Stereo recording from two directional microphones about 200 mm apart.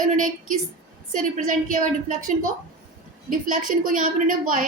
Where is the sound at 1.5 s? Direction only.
40° right (ahead or behind).